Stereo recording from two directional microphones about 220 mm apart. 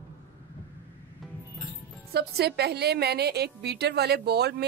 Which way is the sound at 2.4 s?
50° right (ahead or behind).